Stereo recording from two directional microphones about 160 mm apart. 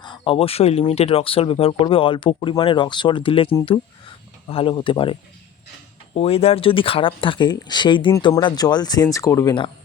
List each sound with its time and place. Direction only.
0.0 s speech: 30° left (ahead or behind)
6.1 s speech: 40° left (ahead or behind)